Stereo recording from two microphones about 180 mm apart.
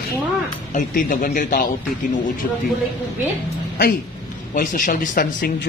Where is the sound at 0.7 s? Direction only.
50° left (ahead or behind).